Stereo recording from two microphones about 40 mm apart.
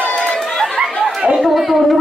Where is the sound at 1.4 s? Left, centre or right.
Centre.